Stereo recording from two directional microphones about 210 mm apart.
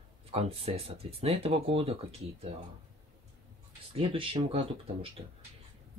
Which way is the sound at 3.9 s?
25° right (ahead or behind).